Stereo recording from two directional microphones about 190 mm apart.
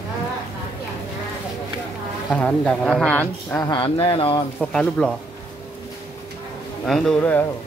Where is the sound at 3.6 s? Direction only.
25° left (ahead or behind).